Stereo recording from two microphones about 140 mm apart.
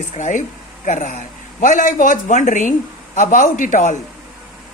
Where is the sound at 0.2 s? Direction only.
65° left (ahead or behind).